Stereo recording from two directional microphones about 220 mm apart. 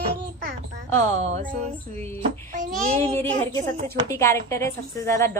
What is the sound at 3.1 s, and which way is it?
A woman's voice, 15° left (ahead or behind).